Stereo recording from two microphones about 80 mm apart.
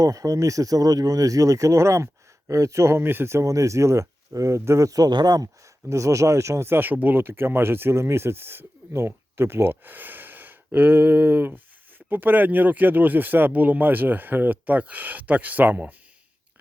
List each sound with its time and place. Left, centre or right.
0.0 s speech: right
5.9 s speech: right